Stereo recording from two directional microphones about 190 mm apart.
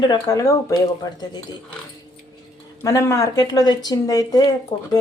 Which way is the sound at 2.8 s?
15° left (ahead or behind).